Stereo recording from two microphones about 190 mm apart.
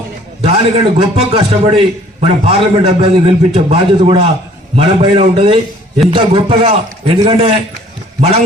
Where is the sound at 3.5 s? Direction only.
35° right (ahead or behind).